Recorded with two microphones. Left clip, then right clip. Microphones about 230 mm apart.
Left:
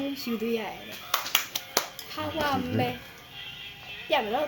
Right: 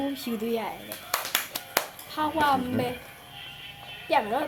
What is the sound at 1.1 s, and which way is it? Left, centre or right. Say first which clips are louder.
Clapping: left 2 dB; right.